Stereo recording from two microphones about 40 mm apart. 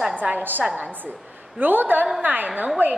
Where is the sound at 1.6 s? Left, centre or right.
Right.